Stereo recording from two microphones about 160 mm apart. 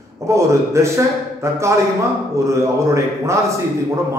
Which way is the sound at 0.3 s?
20° right (ahead or behind).